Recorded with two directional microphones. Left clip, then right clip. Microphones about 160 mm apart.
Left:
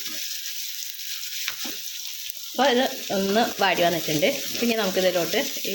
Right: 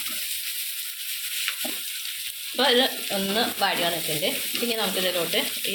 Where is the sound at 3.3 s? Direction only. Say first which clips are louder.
Left 3 dB; 60° left (ahead or behind).